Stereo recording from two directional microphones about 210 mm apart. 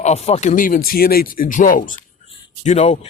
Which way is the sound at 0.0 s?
30° left (ahead or behind).